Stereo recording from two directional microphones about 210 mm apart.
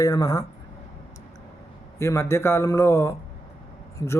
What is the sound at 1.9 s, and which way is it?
A man's voice, 15° left (ahead or behind).